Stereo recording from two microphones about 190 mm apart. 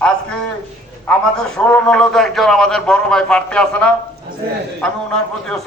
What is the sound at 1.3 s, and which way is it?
A man's voice, 5° left (ahead or behind).